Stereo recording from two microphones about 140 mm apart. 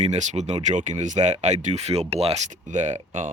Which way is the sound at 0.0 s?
55° right (ahead or behind).